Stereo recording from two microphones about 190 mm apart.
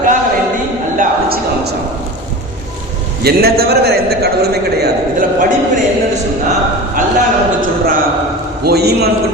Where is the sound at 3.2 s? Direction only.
55° right (ahead or behind).